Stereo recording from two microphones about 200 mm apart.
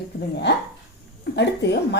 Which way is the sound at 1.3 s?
60° left (ahead or behind).